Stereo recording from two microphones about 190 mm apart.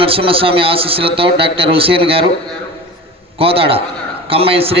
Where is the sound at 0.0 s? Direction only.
30° right (ahead or behind).